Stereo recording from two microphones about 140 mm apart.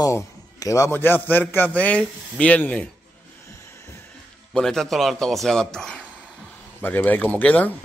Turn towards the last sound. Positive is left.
turn(degrees=10)  # may be behind; listen again after turning